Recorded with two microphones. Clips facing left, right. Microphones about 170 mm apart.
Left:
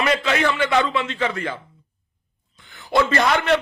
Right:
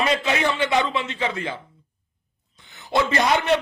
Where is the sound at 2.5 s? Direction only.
20° right (ahead or behind).